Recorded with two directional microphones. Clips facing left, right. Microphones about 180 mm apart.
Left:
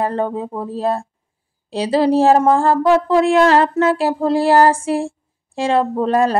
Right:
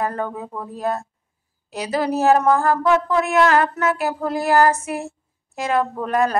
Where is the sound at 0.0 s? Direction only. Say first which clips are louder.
Left 5 dB; 30° left (ahead or behind).